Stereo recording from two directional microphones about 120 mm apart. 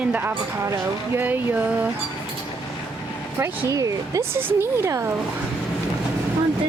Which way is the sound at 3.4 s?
25° right (ahead or behind).